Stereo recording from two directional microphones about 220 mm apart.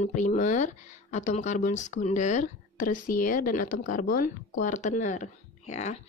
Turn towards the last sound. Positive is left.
turn(degrees=30)  # may be behind; listen again after turning